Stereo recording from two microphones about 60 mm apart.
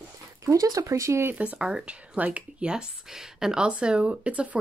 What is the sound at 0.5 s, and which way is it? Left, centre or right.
Speech, right.